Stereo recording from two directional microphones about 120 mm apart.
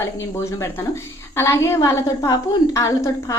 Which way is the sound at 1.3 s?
20° left (ahead or behind).